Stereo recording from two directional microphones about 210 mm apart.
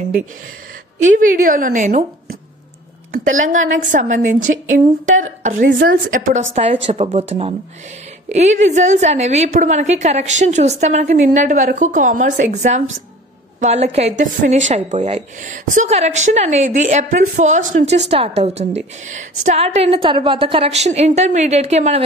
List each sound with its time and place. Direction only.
1.0 s a woman's voice: 40° right (ahead or behind)
3.4 s a woman's voice: 35° right (ahead or behind)
5.7 s a woman's voice: 55° right (ahead or behind)
6.0 s a woman's voice: 40° right (ahead or behind)